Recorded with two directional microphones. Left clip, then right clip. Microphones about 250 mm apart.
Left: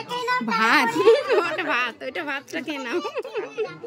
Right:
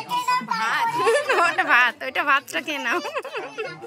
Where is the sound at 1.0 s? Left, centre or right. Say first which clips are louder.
Left 1 dB; centre.